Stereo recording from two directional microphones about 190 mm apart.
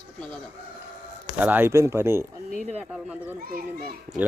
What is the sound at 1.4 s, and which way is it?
Speech, 10° right (ahead or behind).